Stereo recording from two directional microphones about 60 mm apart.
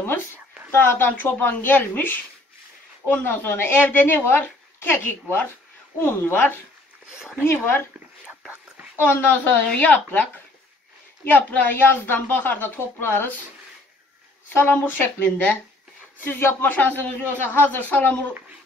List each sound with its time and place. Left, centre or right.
0.7 s a woman's voice: left
7.1 s speech: centre
7.4 s speech: left
8.9 s a woman's voice: left
11.2 s a woman's voice: left
14.5 s a woman's voice: left
16.3 s a woman's voice: left
16.7 s a man's voice: left